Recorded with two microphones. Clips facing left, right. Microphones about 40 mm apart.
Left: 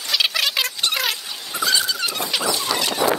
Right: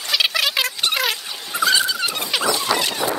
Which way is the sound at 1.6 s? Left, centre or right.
Centre.